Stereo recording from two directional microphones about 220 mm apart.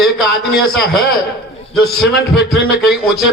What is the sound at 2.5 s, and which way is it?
Speech, centre (ahead or behind).